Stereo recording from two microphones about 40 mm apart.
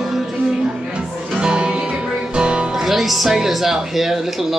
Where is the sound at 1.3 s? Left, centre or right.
Right.